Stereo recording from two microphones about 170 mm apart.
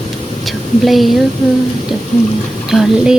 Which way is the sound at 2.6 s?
5° right (ahead or behind).